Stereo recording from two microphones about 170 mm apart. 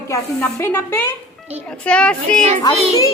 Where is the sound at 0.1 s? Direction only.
10° left (ahead or behind).